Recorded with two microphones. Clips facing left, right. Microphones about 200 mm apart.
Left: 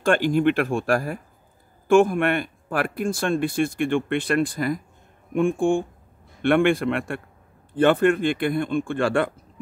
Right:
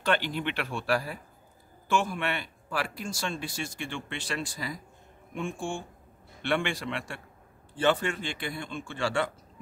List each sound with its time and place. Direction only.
0.0 s speech: 50° left (ahead or behind)